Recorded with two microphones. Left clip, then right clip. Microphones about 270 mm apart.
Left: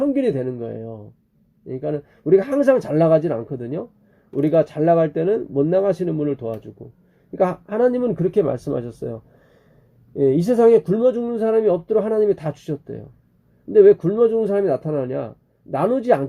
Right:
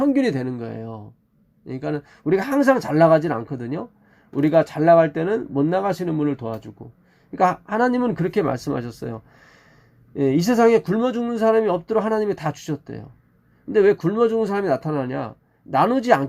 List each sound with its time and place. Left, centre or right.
0.0 s speech: right
10.2 s speech: right